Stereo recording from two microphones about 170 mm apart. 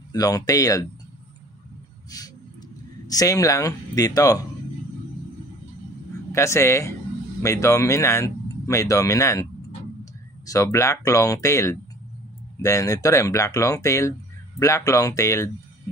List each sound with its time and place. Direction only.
0.1 s speech: 20° left (ahead or behind)
3.1 s speech: 20° left (ahead or behind)
6.3 s speech: 15° left (ahead or behind)